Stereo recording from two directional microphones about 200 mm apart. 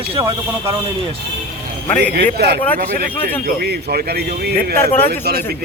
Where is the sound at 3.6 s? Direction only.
50° right (ahead or behind).